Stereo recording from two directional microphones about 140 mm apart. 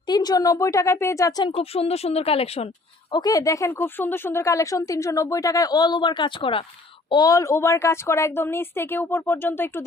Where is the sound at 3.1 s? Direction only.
30° left (ahead or behind).